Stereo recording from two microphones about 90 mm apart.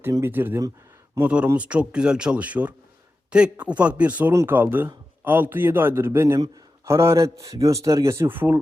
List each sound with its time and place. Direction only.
0.2 s a man's voice: 25° right (ahead or behind)
4.3 s a man's voice: 25° right (ahead or behind)